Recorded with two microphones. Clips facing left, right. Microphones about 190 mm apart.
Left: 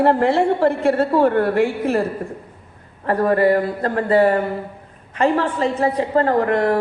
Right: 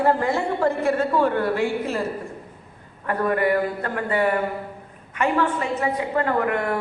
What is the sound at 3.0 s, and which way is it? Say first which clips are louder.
A woman's voice: left 6 dB; 35° left (ahead or behind).